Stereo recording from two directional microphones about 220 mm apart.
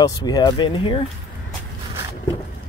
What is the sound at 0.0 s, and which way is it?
Speech, 15° left (ahead or behind).